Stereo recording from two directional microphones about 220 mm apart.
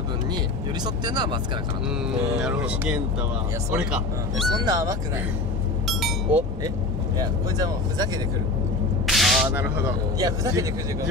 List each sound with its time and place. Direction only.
0.8 s speech: 20° right (ahead or behind)
2.0 s speech: 5° right (ahead or behind)
4.6 s speech: 15° right (ahead or behind)
5.9 s chink: centre (ahead or behind)
7.2 s speech: 15° right (ahead or behind)
9.0 s speech: centre (ahead or behind)